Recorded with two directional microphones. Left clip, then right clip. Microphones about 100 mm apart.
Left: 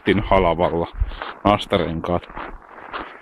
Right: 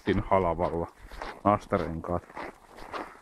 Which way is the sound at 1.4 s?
20° left (ahead or behind).